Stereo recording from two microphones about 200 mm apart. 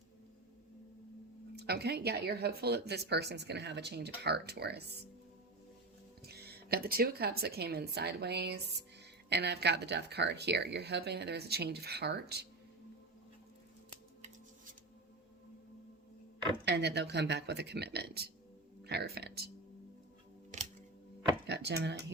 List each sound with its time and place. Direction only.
1.5 s speech: 55° right (ahead or behind)
6.2 s speech: 55° right (ahead or behind)
16.6 s speech: 55° right (ahead or behind)
21.4 s speech: 55° right (ahead or behind)